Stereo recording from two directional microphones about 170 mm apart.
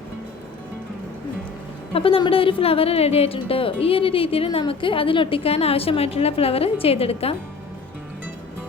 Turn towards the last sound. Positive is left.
turn(degrees=35)  # may be behind; listen again after turning